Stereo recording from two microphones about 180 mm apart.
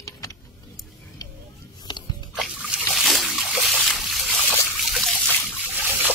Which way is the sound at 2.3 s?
Centre (ahead or behind).